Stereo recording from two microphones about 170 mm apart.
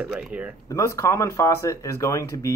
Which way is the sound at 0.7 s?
15° left (ahead or behind).